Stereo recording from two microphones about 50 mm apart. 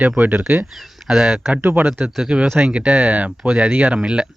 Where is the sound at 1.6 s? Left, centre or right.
Right.